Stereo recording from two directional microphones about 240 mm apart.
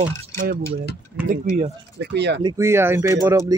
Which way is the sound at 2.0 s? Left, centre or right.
Right.